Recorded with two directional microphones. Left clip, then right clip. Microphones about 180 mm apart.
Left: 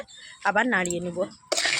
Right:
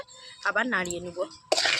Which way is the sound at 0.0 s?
40° left (ahead or behind).